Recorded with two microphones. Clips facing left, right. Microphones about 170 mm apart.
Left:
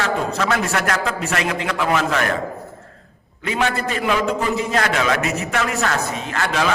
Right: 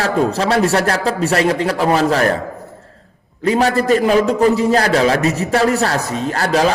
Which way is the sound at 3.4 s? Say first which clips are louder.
Right 7 dB; 35° right (ahead or behind).